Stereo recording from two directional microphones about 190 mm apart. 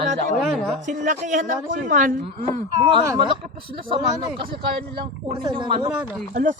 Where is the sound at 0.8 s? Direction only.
40° right (ahead or behind).